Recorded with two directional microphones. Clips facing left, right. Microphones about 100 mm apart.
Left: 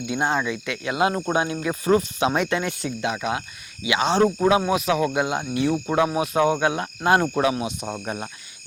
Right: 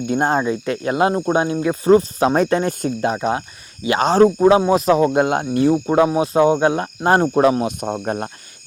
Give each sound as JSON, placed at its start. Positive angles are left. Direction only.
{"t": 0.0, "sound": "speech", "side_deg": -45}
{"t": 5.2, "sound": "speech", "side_deg": -50}
{"t": 5.7, "sound": "speech", "side_deg": -25}